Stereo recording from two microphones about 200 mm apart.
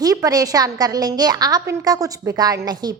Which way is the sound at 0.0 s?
20° right (ahead or behind).